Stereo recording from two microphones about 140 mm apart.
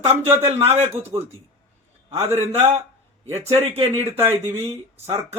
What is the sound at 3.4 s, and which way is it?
Speech, 50° right (ahead or behind).